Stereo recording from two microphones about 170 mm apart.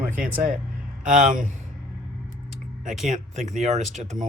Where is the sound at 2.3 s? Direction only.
50° right (ahead or behind).